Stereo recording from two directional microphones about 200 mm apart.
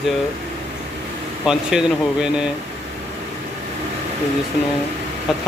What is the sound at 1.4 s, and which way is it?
Speech, 5° right (ahead or behind).